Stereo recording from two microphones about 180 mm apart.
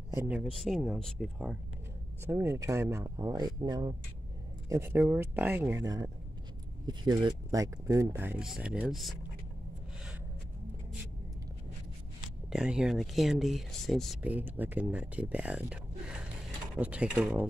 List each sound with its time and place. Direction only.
0.1 s speech: 15° right (ahead or behind)
0.4 s speech: centre (ahead or behind)
2.2 s speech: 15° right (ahead or behind)
12.4 s speech: 5° right (ahead or behind)
14.2 s speech: 10° right (ahead or behind)